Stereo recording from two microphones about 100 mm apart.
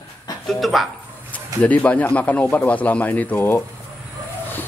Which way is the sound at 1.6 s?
15° left (ahead or behind).